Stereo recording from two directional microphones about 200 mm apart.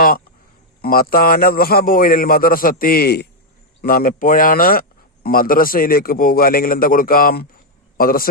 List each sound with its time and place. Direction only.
0.8 s speech: 45° left (ahead or behind)